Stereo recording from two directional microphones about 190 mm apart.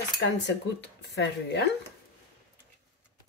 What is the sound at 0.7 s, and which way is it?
Speech, 65° left (ahead or behind).